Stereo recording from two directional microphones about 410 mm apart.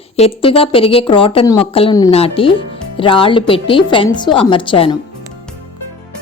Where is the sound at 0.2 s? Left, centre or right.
Centre.